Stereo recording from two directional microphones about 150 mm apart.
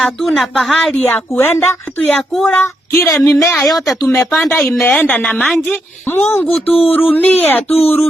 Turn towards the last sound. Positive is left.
turn(degrees=40)  # may be behind; listen again after turning